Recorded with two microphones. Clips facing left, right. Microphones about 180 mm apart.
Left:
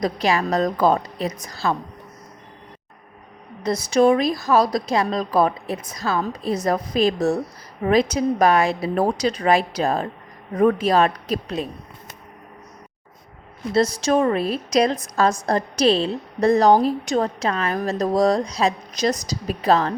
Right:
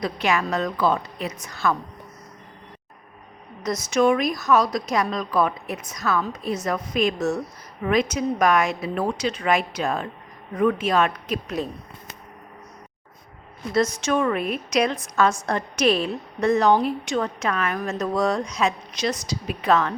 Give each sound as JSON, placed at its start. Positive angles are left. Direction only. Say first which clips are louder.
{"t": 0.0, "sound": "a woman's voice", "louder": "left 3 dB", "side_deg": 35}
{"t": 3.6, "sound": "a woman's voice", "louder": "left 3 dB", "side_deg": 30}
{"t": 13.7, "sound": "a woman's voice", "louder": "left 3 dB", "side_deg": 35}